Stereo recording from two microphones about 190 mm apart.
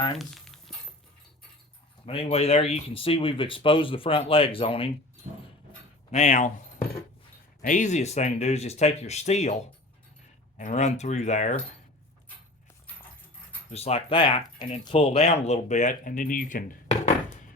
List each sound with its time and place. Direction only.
0.2 s a sound: centre (ahead or behind)
2.0 s speech: 30° left (ahead or behind)
6.1 s speech: 35° left (ahead or behind)
13.7 s speech: 35° left (ahead or behind)